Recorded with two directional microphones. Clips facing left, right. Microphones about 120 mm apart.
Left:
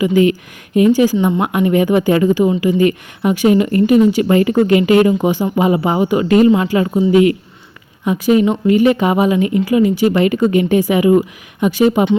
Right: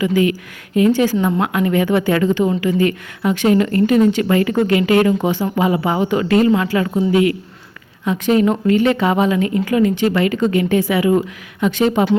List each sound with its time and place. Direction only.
0.0 s a woman's voice: 20° left (ahead or behind)